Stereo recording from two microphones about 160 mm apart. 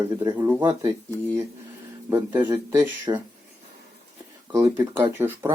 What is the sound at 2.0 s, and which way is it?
Speech, 10° right (ahead or behind).